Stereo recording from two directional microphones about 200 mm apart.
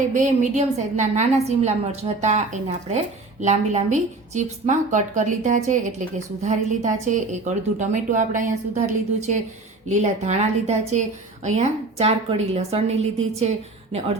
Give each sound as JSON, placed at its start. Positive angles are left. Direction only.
{"t": 0.1, "sound": "a woman's voice", "side_deg": -40}
{"t": 9.9, "sound": "a woman's voice", "side_deg": -35}